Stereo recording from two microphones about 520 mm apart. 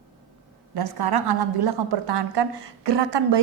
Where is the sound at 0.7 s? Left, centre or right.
Right.